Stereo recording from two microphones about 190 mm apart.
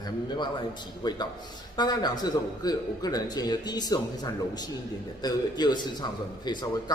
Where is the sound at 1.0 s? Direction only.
20° left (ahead or behind).